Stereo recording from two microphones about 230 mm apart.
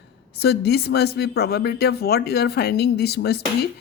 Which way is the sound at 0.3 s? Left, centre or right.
Left.